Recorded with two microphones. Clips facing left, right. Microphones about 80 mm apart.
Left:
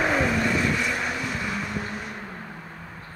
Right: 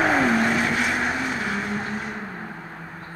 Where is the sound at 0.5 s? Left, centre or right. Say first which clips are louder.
Right 2 dB; right.